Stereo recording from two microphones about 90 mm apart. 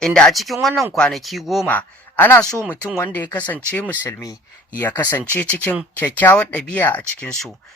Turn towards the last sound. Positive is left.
turn(degrees=10)  # may be behind; listen again after turning